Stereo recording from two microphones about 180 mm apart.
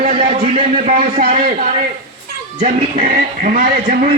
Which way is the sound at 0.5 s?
45° right (ahead or behind).